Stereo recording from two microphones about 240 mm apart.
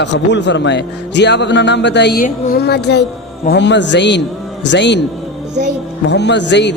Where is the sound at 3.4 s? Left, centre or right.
Left.